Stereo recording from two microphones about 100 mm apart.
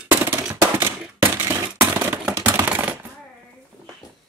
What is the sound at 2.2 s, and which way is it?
Typewriter, 15° right (ahead or behind).